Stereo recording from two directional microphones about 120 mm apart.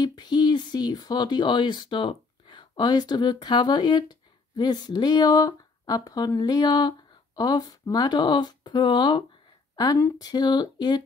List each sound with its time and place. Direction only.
0.0 s speech: 35° left (ahead or behind)